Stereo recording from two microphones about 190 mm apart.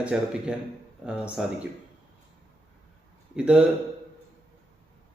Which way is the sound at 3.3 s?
5° right (ahead or behind).